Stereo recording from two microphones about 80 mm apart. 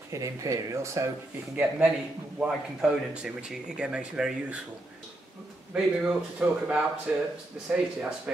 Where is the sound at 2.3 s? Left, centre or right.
Centre.